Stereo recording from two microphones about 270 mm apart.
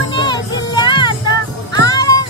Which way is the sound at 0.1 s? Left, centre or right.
Centre.